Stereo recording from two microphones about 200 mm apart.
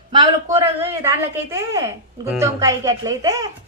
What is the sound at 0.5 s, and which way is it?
A woman's voice, 15° right (ahead or behind).